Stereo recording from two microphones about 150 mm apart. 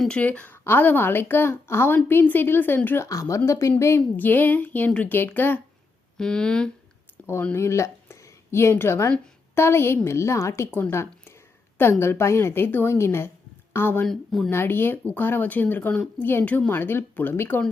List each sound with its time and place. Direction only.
0.0 s speech: 10° left (ahead or behind)
7.3 s a woman's voice: 15° left (ahead or behind)
14.1 s speech: centre (ahead or behind)
14.5 s speech: 15° left (ahead or behind)